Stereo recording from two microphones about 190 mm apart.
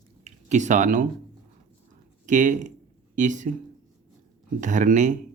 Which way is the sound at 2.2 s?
40° right (ahead or behind).